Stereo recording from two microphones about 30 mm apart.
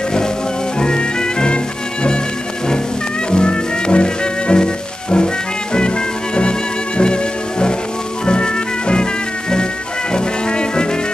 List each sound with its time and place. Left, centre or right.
0.7 s music: left
3.3 s music: left
10.1 s music: left